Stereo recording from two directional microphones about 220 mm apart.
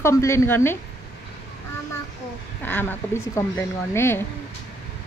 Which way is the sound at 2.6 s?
10° left (ahead or behind).